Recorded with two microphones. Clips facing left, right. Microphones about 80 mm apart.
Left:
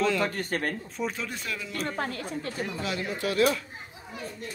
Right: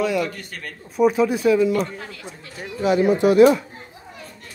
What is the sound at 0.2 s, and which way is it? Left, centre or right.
Speech, left.